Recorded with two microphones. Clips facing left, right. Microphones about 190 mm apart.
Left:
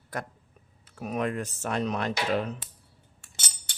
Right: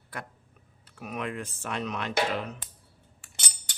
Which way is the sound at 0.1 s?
45° left (ahead or behind).